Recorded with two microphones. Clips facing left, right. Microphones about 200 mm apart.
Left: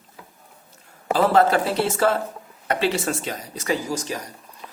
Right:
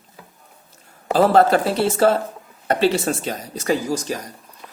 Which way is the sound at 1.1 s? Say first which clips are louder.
Right 3 dB; 40° right (ahead or behind).